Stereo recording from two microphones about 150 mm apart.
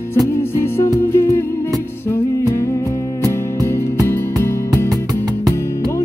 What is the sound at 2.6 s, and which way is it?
Music, 15° left (ahead or behind).